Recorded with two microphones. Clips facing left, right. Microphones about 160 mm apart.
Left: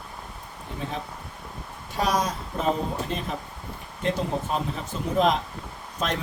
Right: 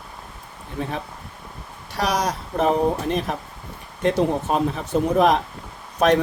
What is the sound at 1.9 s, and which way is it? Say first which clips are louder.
Speech: right 2 dB; 75° right (ahead or behind).